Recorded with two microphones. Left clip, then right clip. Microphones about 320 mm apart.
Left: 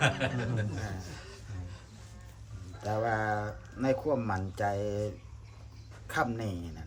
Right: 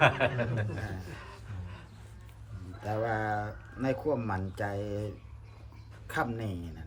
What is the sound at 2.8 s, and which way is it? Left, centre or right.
Speech, centre.